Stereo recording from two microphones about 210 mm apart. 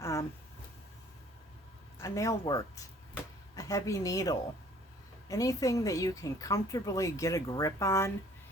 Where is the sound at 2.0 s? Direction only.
15° left (ahead or behind).